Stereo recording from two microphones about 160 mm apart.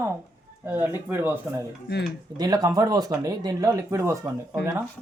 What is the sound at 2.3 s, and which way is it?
Speech, 25° right (ahead or behind).